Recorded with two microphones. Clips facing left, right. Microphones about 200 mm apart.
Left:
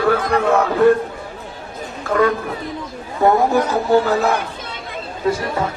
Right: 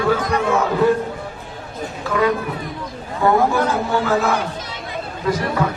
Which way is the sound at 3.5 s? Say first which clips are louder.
Left 4 dB; 35° left (ahead or behind).